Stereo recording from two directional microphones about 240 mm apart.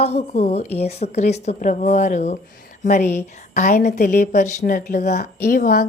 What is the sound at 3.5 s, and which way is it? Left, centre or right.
A woman's voice, left.